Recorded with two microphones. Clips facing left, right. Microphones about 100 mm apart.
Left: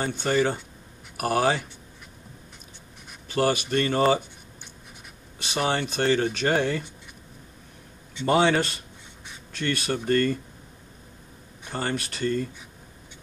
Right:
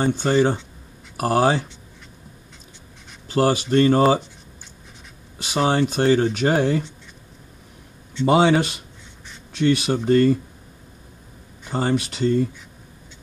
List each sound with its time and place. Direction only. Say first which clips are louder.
0.0 s speech: right 5 dB; 30° right (ahead or behind)
3.7 s speech: right 8 dB; 30° right (ahead or behind)
5.4 s speech: right 6 dB; 20° right (ahead or behind)
8.3 s speech: right 4 dB; 20° right (ahead or behind)
11.7 s speech: right 7 dB; 20° right (ahead or behind)